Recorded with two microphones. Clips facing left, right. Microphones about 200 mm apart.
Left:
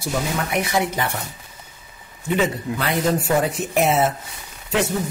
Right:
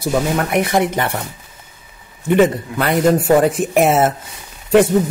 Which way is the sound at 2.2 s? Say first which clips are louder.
Right 8 dB; 55° right (ahead or behind).